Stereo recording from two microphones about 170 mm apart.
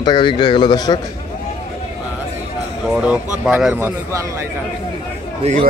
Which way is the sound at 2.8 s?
5° right (ahead or behind).